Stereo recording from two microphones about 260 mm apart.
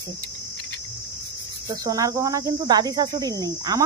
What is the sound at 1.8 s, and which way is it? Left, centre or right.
Cricket, centre.